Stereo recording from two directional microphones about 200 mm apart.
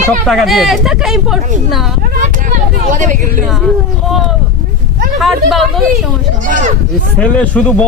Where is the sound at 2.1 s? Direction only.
40° right (ahead or behind).